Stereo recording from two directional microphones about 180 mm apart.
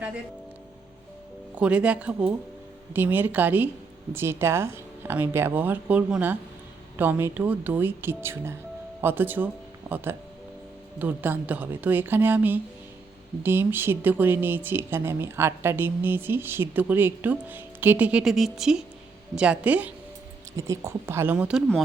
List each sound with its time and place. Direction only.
1.5 s speech: 5° right (ahead or behind)